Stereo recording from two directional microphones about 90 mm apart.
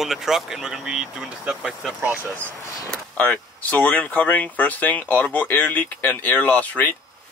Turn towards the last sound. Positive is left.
turn(degrees=15)  # may be behind; listen again after turning